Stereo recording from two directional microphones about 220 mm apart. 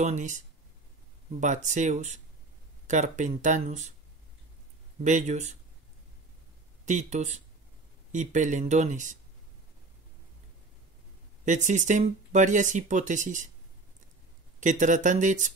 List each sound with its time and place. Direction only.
0.0 s speech: 35° right (ahead or behind)
1.4 s speech: 35° right (ahead or behind)
5.0 s speech: 30° right (ahead or behind)
6.9 s speech: 30° right (ahead or behind)
11.4 s speech: 35° right (ahead or behind)
14.6 s speech: 35° right (ahead or behind)